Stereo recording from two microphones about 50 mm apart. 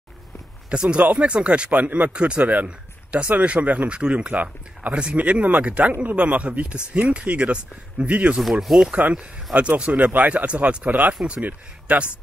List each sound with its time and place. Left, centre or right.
0.7 s speech: right
8.4 s speech: centre
9.1 s speech: right